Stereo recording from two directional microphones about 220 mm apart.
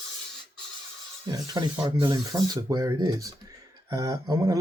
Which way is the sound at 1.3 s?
15° right (ahead or behind).